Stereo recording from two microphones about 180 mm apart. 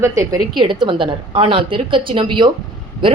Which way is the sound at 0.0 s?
15° right (ahead or behind).